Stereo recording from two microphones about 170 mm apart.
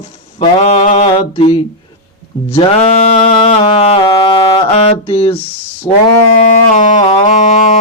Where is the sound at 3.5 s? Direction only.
35° left (ahead or behind).